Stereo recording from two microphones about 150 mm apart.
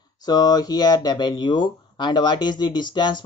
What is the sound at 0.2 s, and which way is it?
Speech, 25° left (ahead or behind).